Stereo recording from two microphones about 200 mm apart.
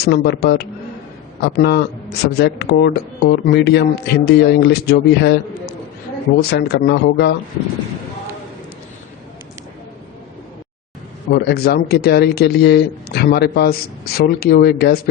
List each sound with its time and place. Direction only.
0.0 s speech: 55° left (ahead or behind)
11.3 s speech: 50° left (ahead or behind)